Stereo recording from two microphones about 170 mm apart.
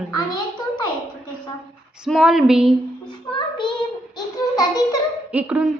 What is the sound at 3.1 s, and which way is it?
Child singing, 30° left (ahead or behind).